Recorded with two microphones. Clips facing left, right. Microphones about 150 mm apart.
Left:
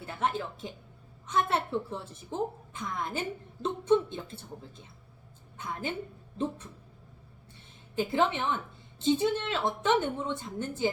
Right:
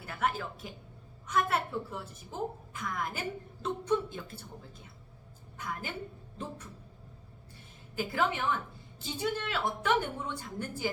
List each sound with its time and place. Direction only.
0.0 s a sound: 25° left (ahead or behind)
1.3 s a woman's voice: 25° left (ahead or behind)
5.5 s a woman's voice: 25° left (ahead or behind)
7.9 s a woman's voice: 25° left (ahead or behind)